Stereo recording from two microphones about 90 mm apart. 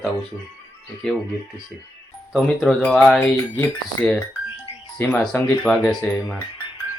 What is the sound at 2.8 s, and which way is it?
Speech, 10° left (ahead or behind).